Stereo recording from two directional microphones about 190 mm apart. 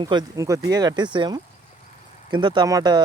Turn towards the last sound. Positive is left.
turn(degrees=-20)  # may be behind; listen again after turning